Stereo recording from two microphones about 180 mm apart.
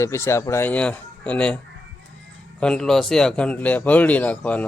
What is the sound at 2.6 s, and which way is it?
Speech, 5° left (ahead or behind).